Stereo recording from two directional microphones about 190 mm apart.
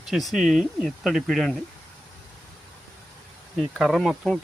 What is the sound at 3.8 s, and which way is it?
Speech, centre (ahead or behind).